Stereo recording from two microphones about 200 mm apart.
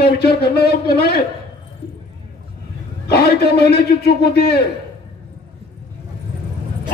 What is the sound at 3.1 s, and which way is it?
A man's voice, 55° left (ahead or behind).